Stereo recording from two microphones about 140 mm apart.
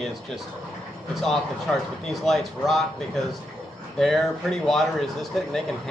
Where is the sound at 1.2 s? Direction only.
5° left (ahead or behind).